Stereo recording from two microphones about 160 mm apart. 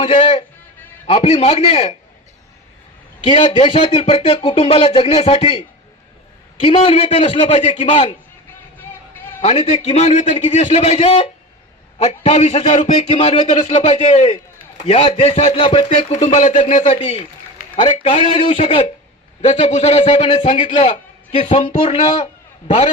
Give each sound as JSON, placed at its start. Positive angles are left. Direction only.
{"t": 0.0, "sound": "a man's voice", "side_deg": 35}
{"t": 3.2, "sound": "a man's voice", "side_deg": 35}
{"t": 9.4, "sound": "a man's voice", "side_deg": 40}
{"t": 16.3, "sound": "a man's voice", "side_deg": 45}